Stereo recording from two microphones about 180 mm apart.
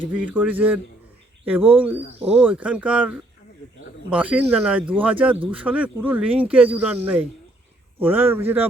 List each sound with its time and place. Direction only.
0.2 s speech: 10° right (ahead or behind)